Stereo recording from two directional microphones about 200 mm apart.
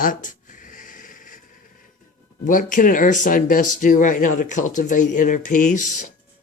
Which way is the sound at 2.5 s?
40° left (ahead or behind).